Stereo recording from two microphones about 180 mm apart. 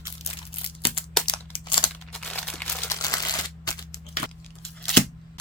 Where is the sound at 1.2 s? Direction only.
25° left (ahead or behind).